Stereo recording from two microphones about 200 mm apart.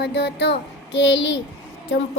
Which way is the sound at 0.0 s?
60° left (ahead or behind).